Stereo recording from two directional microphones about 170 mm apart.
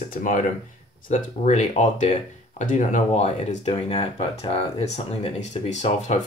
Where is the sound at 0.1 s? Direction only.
50° left (ahead or behind).